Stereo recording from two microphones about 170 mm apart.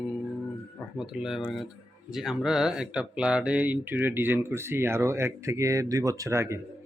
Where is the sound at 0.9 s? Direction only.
5° right (ahead or behind).